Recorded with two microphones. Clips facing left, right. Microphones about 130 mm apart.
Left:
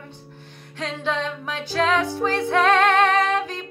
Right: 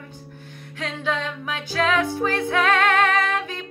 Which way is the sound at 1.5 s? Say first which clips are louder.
Left 1 dB; 35° left (ahead or behind).